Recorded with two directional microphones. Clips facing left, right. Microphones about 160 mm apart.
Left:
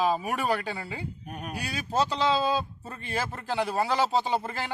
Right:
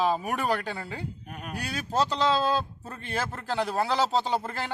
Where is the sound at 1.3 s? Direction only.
40° left (ahead or behind).